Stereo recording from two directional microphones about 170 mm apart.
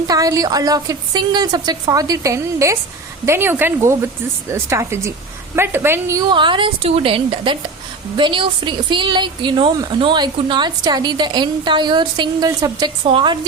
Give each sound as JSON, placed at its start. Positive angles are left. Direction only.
{"t": 0.1, "sound": "a woman's voice", "side_deg": -20}
{"t": 6.3, "sound": "a woman's voice", "side_deg": -30}